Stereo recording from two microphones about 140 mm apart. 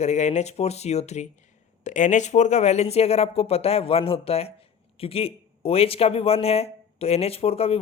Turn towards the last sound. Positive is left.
turn(degrees=45)  # may be behind; listen again after turning